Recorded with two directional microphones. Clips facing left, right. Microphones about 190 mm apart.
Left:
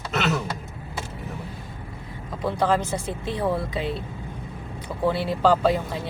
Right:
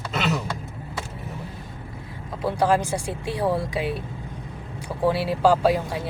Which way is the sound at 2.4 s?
10° right (ahead or behind).